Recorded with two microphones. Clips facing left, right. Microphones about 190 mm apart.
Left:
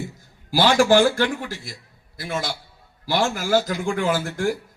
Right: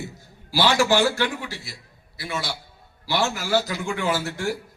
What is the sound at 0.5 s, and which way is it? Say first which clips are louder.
A man's voice: left 4 dB; 50° left (ahead or behind).